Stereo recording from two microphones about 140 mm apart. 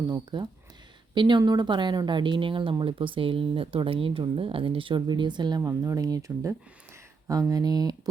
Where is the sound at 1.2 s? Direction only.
35° right (ahead or behind).